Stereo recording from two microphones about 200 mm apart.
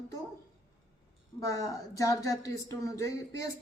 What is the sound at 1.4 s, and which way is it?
Speech, 15° left (ahead or behind).